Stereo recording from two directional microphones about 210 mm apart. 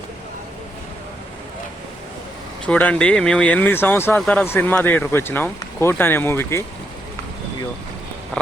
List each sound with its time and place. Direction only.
2.6 s speech: 5° left (ahead or behind)